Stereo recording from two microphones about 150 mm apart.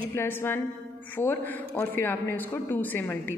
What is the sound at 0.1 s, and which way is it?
A man's voice, 15° left (ahead or behind).